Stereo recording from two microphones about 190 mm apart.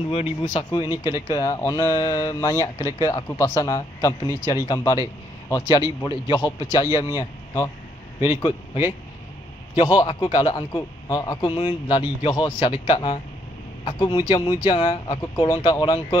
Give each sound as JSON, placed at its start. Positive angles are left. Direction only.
{"t": 0.1, "sound": "speech", "side_deg": 35}
{"t": 0.7, "sound": "a man's voice", "side_deg": 20}
{"t": 9.8, "sound": "a man's voice", "side_deg": 20}